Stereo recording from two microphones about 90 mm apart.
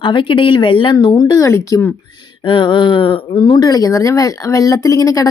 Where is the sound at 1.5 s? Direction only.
30° left (ahead or behind).